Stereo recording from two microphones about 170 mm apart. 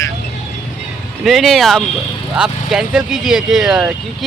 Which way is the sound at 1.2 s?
Centre (ahead or behind).